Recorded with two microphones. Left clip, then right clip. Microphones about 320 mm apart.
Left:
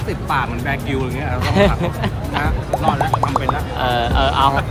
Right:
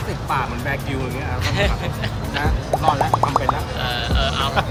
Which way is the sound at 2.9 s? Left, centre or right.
Centre.